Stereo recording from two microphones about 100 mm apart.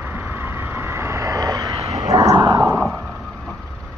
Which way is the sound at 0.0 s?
20° right (ahead or behind).